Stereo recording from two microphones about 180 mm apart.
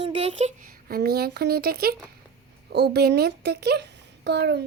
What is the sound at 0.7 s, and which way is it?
A child's voice, 60° right (ahead or behind).